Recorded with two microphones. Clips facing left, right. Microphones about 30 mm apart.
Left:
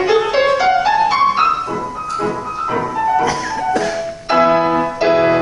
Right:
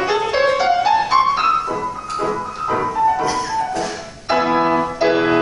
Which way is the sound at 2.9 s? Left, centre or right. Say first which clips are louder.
Left 1 dB; centre.